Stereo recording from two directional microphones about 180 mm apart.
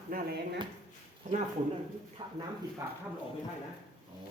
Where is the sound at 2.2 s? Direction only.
25° right (ahead or behind).